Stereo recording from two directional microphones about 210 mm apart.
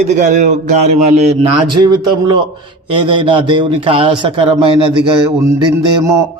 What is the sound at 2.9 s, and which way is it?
A man's voice, 25° right (ahead or behind).